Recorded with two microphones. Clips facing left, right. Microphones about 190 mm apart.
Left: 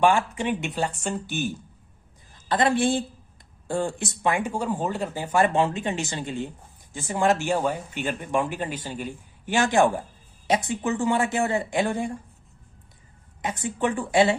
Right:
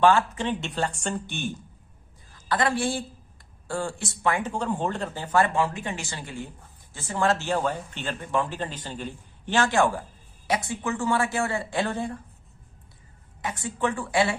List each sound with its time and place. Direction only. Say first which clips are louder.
0.0 s speech: even; 15° left (ahead or behind)
2.5 s speech: left 4 dB; 20° left (ahead or behind)
13.4 s speech: left 2 dB; 20° left (ahead or behind)